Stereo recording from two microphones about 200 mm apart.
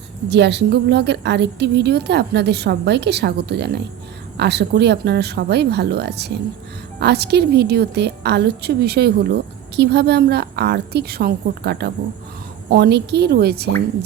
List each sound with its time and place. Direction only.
0.3 s a woman's voice: 60° right (ahead or behind)